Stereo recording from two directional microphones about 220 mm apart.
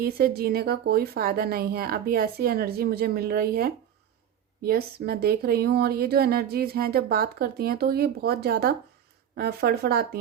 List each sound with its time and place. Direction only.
0.0 s speech: 45° right (ahead or behind)